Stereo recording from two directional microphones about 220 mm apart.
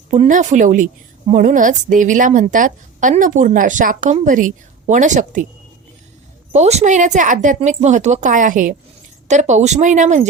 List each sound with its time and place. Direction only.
0.1 s a woman's voice: 35° right (ahead or behind)
6.5 s a woman's voice: 30° right (ahead or behind)